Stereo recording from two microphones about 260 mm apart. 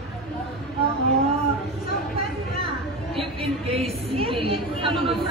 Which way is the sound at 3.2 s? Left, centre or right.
Right.